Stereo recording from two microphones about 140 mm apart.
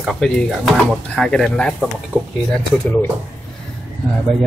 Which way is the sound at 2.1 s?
15° right (ahead or behind).